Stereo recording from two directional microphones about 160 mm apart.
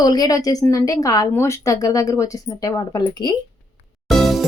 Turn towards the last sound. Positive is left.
turn(degrees=0)  # may be behind; listen again after turning